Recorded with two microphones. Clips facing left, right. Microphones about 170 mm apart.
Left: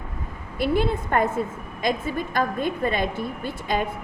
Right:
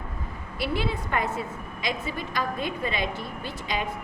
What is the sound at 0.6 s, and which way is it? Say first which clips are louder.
A woman's voice: left 6 dB; 50° left (ahead or behind).